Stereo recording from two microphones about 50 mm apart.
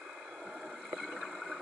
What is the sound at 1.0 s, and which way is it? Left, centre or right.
Boat, centre.